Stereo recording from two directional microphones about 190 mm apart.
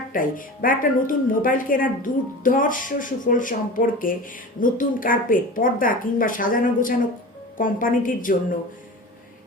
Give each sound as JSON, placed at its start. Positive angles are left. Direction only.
{"t": 0.1, "sound": "speech", "side_deg": 45}